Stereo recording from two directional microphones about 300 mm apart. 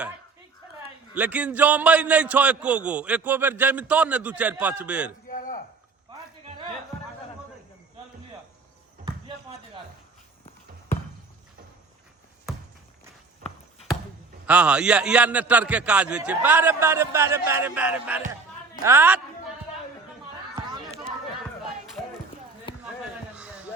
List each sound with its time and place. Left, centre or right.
1.1 s a man's voice: centre
5.3 s a sound: left
14.4 s a man's voice: centre
22.7 s basketball bounce: centre